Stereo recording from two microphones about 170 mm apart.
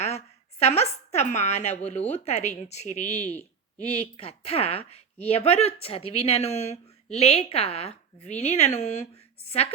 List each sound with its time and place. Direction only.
0.6 s a woman's voice: 40° left (ahead or behind)